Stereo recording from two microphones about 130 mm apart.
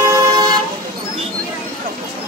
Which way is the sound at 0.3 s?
35° right (ahead or behind).